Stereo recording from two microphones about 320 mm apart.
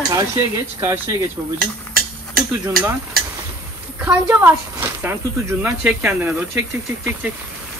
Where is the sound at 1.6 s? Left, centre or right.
Right.